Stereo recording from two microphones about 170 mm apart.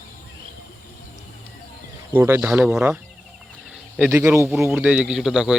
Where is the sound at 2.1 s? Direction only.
15° right (ahead or behind).